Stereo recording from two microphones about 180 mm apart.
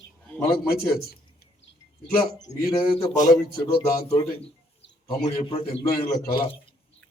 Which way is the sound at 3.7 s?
30° left (ahead or behind).